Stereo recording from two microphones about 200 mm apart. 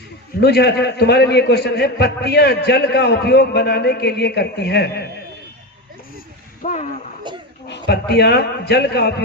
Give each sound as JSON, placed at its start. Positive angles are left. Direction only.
{"t": 0.3, "sound": "a man's voice", "side_deg": 55}
{"t": 6.6, "sound": "speech", "side_deg": 40}
{"t": 7.3, "sound": "a sound", "side_deg": -25}
{"t": 7.7, "sound": "a man's voice", "side_deg": 55}